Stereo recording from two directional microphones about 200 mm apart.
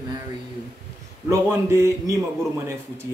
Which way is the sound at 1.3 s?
15° right (ahead or behind).